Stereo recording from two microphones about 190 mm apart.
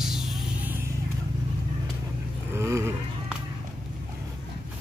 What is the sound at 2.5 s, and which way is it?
Vehicle, 15° right (ahead or behind).